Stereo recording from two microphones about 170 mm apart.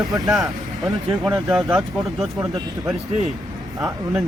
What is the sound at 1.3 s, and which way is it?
Speech, centre (ahead or behind).